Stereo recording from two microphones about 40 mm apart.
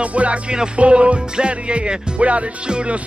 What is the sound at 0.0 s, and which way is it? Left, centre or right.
Music, right.